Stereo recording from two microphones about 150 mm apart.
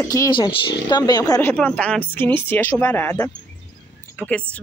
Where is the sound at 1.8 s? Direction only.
10° left (ahead or behind).